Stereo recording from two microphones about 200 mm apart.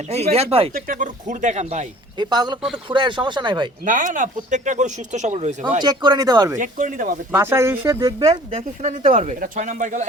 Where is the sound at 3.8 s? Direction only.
40° right (ahead or behind).